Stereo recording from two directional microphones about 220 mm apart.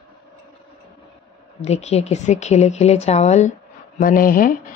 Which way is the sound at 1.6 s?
30° left (ahead or behind).